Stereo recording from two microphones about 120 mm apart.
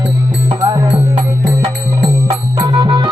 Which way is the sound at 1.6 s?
40° right (ahead or behind).